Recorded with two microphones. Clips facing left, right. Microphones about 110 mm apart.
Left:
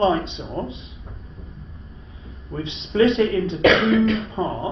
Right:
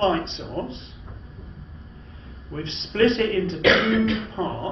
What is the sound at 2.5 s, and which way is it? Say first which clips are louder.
Speech: left 5 dB; 10° left (ahead or behind).